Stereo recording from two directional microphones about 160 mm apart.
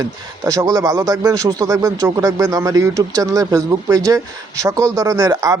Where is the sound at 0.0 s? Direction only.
20° right (ahead or behind).